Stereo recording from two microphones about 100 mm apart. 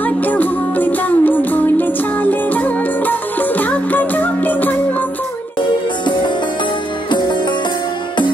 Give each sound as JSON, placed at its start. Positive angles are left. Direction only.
{"t": 0.0, "sound": "music", "side_deg": 15}
{"t": 7.1, "sound": "music", "side_deg": 45}